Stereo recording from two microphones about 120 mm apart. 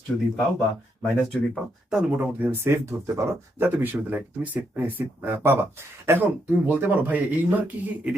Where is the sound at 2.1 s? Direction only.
15° right (ahead or behind).